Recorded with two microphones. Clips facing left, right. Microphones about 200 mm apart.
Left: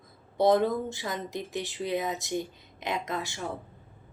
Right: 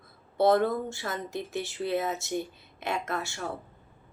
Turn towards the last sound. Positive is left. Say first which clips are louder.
# even
turn(degrees=20)  # may be behind; listen again after turning